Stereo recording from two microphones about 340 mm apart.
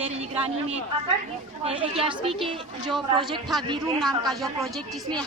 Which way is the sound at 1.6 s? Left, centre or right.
Centre.